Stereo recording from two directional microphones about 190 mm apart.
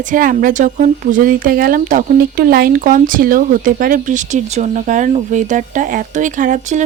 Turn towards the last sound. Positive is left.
turn(degrees=-40)  # may be behind; listen again after turning